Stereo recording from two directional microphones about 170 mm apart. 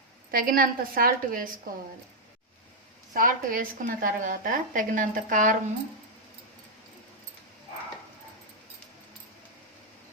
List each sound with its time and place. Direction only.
0.3 s a woman's voice: 55° right (ahead or behind)
3.1 s speech: 55° right (ahead or behind)